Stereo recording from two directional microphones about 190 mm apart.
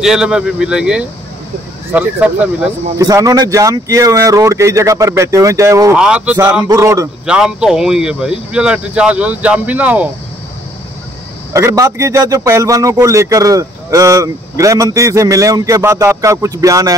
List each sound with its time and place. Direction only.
0.0 s speech: 5° right (ahead or behind)
3.0 s speech: 20° right (ahead or behind)
5.9 s speech: 5° right (ahead or behind)
7.2 s speech: 5° right (ahead or behind)
11.5 s speech: 15° right (ahead or behind)